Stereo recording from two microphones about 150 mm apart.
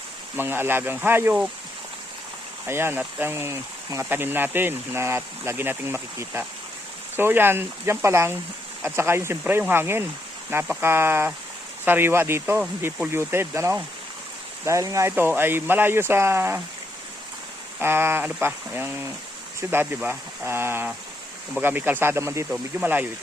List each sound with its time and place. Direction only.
0.3 s speech: 15° right (ahead or behind)
2.6 s speech: 15° right (ahead or behind)
17.7 s speech: 15° right (ahead or behind)